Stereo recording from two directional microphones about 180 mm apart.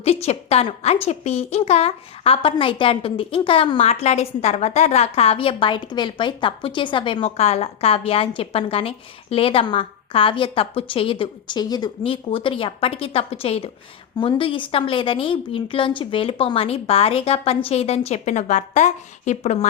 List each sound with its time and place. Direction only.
0.0 s a woman's voice: 35° left (ahead or behind)